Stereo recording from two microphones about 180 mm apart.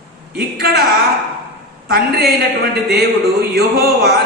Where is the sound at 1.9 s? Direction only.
60° right (ahead or behind).